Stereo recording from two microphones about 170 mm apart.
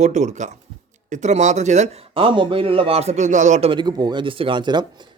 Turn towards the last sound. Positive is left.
turn(degrees=-25)  # may be behind; listen again after turning